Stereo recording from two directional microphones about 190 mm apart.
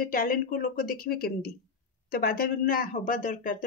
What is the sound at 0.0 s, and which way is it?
Speech, 50° left (ahead or behind).